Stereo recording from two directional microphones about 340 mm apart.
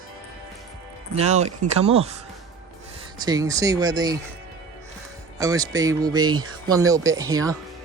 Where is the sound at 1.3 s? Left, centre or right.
Centre.